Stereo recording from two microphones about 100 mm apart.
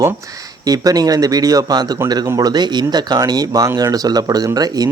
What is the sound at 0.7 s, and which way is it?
Speech, 40° right (ahead or behind).